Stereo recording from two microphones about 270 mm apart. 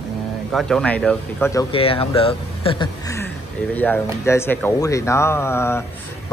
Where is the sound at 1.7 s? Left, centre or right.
Left.